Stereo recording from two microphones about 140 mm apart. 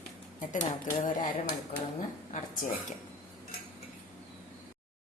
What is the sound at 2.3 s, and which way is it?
Speech, 60° left (ahead or behind).